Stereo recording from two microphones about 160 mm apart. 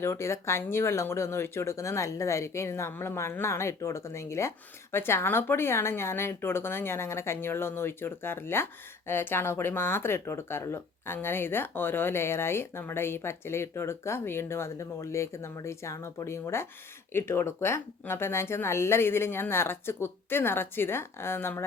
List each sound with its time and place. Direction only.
0.0 s speech: 15° left (ahead or behind)